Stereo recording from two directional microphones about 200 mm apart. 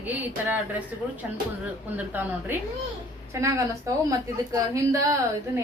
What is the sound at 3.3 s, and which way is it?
Speech, 15° right (ahead or behind).